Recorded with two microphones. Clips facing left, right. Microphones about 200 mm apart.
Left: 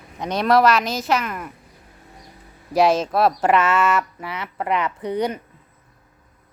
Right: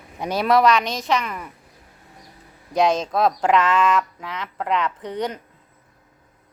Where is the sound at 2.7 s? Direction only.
5° left (ahead or behind).